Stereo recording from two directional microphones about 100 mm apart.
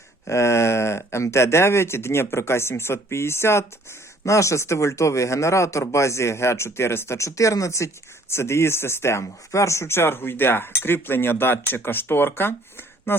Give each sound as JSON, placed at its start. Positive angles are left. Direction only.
{"t": 0.3, "sound": "speech", "side_deg": 30}